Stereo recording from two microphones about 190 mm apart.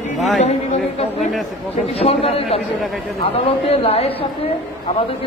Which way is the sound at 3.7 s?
30° left (ahead or behind).